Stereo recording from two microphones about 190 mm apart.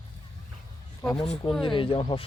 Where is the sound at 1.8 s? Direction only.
25° left (ahead or behind).